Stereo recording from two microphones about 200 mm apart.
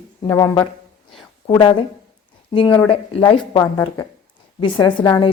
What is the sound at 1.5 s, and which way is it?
A woman's voice, 25° left (ahead or behind).